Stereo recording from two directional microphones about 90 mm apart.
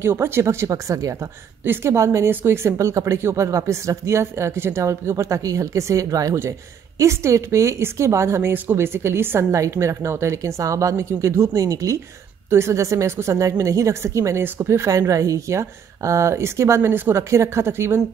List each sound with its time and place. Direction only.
0.0 s speech: 25° right (ahead or behind)
1.6 s a woman's voice: 25° right (ahead or behind)